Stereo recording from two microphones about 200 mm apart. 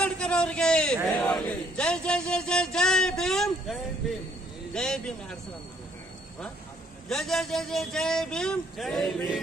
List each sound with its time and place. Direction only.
0.0 s a sound: 5° left (ahead or behind)
4.7 s a man's voice: 5° left (ahead or behind)
7.1 s a man's voice: centre (ahead or behind)